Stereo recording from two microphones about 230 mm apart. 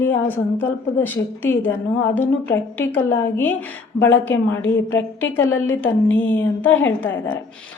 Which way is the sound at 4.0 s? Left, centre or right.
Left.